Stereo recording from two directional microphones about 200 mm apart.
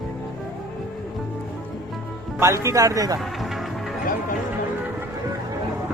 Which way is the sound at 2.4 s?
15° right (ahead or behind).